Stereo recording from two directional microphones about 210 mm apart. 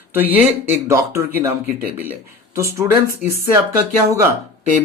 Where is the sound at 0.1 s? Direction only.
10° right (ahead or behind).